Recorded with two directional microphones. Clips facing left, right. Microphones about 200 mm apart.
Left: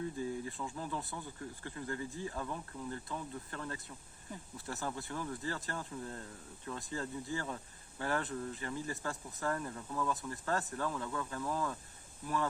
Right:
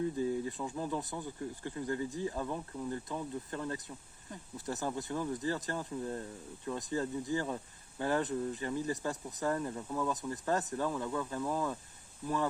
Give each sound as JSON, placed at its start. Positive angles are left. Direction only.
{"t": 0.2, "sound": "speech", "side_deg": -20}